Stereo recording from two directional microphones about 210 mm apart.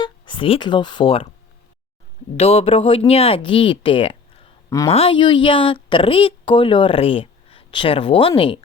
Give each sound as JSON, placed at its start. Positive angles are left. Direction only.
{"t": 0.0, "sound": "speech", "side_deg": 25}
{"t": 2.3, "sound": "a woman's voice", "side_deg": 30}